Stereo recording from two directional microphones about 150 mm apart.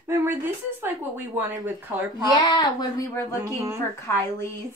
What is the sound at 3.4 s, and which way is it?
Speech, 20° right (ahead or behind).